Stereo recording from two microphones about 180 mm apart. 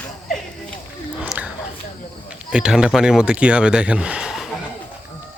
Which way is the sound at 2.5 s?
5° right (ahead or behind).